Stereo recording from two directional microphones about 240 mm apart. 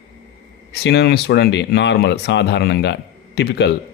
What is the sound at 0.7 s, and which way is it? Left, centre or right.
Speech, left.